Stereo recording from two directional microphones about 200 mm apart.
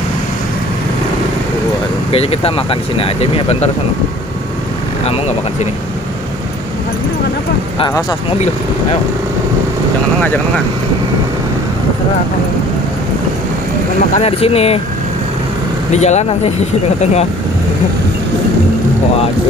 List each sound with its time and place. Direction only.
2.1 s speech: 30° left (ahead or behind)
5.0 s speech: 30° left (ahead or behind)
7.8 s speech: 20° left (ahead or behind)
14.1 s speech: 30° left (ahead or behind)
15.9 s speech: 35° left (ahead or behind)